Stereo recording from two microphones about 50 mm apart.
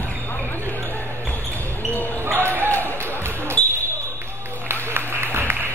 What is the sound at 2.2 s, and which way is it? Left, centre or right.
Basketball bounce, right.